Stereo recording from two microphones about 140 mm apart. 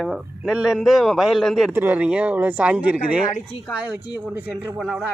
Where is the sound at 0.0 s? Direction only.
5° right (ahead or behind).